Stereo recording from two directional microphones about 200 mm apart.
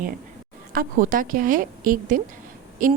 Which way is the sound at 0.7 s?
45° right (ahead or behind).